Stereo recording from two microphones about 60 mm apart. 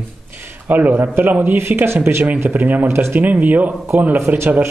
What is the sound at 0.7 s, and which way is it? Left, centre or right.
Speech, right.